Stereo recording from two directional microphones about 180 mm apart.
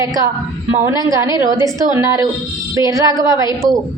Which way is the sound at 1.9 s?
15° right (ahead or behind).